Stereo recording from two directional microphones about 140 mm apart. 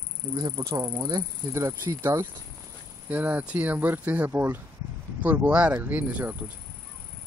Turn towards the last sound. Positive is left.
turn(degrees=-10)  # may be behind; listen again after turning